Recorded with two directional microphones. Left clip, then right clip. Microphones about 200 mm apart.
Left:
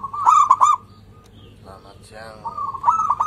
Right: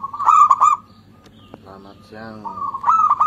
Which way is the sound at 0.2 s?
Centre (ahead or behind).